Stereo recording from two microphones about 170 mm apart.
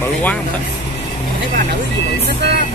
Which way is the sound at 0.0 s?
10° left (ahead or behind).